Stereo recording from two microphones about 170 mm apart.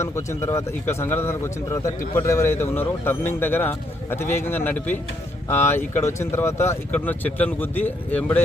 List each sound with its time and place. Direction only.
0.0 s speech: 15° left (ahead or behind)